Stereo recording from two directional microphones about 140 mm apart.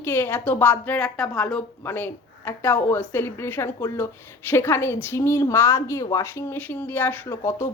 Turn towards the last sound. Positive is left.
turn(degrees=20)  # may be behind; listen again after turning